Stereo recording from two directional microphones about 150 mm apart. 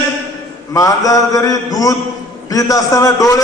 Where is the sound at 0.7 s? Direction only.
25° left (ahead or behind).